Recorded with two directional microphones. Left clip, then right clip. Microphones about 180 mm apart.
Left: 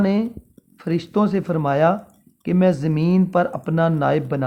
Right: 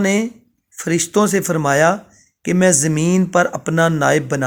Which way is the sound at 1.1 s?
30° right (ahead or behind).